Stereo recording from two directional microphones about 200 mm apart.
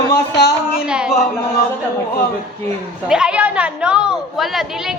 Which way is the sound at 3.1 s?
5° right (ahead or behind).